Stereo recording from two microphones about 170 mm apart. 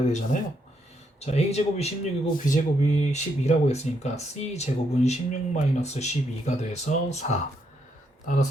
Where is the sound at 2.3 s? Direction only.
50° left (ahead or behind).